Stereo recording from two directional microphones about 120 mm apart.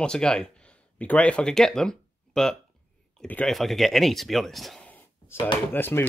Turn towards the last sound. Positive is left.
turn(degrees=15)  # may be behind; listen again after turning